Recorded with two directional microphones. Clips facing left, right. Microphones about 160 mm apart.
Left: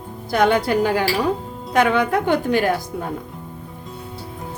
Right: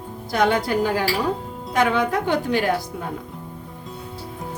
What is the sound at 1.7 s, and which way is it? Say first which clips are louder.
Speech: left 3 dB; 60° left (ahead or behind).